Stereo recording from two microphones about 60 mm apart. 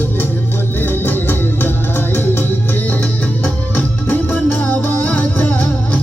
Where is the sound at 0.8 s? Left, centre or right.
Left.